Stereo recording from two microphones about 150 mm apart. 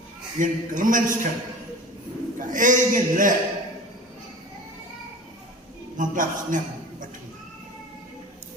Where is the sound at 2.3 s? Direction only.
60° right (ahead or behind).